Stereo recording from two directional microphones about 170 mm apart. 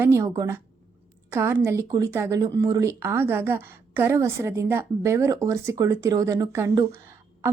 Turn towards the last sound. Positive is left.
turn(degrees=-20)  # may be behind; listen again after turning